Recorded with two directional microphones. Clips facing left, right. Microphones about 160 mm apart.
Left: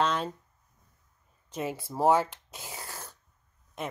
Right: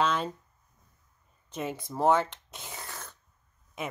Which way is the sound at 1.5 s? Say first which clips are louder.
Left 1 dB; 5° left (ahead or behind).